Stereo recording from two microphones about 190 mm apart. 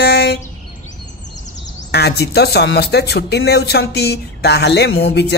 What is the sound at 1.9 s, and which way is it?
Speech, 60° left (ahead or behind).